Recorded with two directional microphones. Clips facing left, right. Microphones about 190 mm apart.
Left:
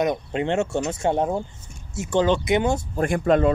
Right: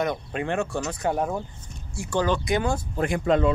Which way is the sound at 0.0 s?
20° left (ahead or behind).